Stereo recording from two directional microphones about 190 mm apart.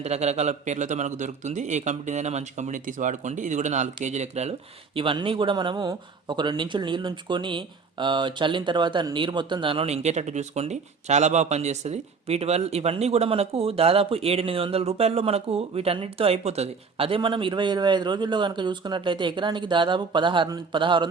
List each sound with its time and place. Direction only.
0.0 s a man's voice: 35° right (ahead or behind)